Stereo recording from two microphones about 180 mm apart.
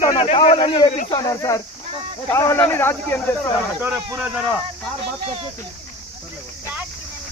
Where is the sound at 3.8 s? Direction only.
10° right (ahead or behind).